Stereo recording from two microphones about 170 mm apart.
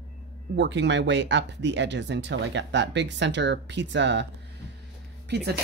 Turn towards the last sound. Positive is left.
turn(degrees=-75)  # may be behind; listen again after turning